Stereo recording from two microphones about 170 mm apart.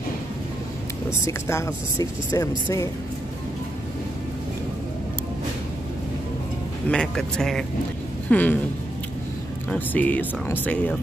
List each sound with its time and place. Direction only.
1.2 s speech: 15° left (ahead or behind)
6.9 s speech: 5° left (ahead or behind)
9.7 s speech: 10° left (ahead or behind)